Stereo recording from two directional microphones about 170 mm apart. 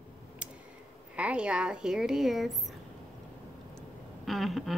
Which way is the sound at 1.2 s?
5° right (ahead or behind).